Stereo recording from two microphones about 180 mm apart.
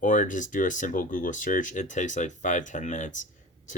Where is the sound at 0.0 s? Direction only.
45° left (ahead or behind).